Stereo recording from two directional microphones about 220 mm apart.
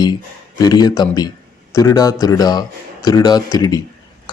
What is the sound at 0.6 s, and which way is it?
A man's voice, 20° left (ahead or behind).